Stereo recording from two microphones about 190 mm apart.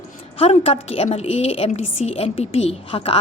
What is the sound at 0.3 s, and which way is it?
A woman's voice, 30° left (ahead or behind).